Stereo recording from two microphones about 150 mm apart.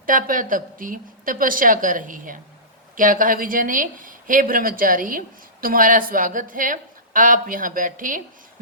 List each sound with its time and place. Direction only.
0.0 s a woman's voice: 65° right (ahead or behind)